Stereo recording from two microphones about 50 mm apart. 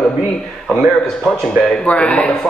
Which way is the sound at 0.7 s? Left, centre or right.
Centre.